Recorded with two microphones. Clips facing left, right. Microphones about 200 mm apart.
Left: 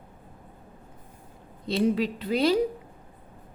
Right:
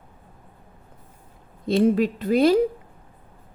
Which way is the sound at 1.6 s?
50° right (ahead or behind).